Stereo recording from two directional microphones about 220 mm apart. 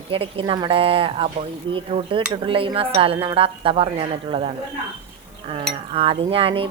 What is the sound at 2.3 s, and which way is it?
A woman's voice, 25° right (ahead or behind).